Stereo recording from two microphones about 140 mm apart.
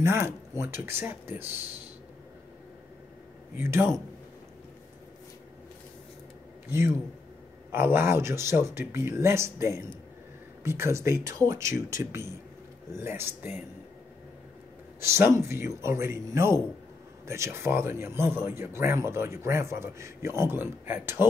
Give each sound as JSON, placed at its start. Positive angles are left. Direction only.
{"t": 0.0, "sound": "speech", "side_deg": -20}
{"t": 3.5, "sound": "speech", "side_deg": -15}
{"t": 6.7, "sound": "speech", "side_deg": -15}
{"t": 15.0, "sound": "speech", "side_deg": -20}